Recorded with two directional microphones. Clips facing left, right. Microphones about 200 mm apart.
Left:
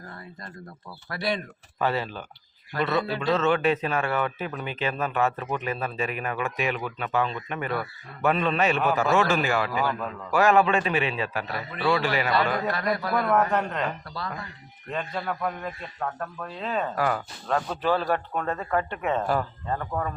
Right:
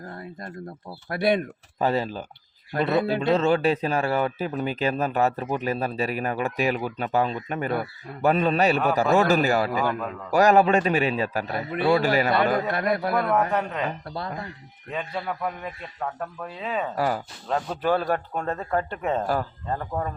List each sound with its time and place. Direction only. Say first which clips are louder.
1.1 s speech: right 6 dB; 55° right (ahead or behind)
1.8 s speech: right 3 dB; 40° right (ahead or behind); by 13.0 s 55° right (ahead or behind)
13.1 s a man's voice: even; centre (ahead or behind)
14.9 s a man's voice: even; 5° right (ahead or behind)
17.8 s speech: right 2 dB; 50° right (ahead or behind)
18.3 s speech: even; 35° right (ahead or behind)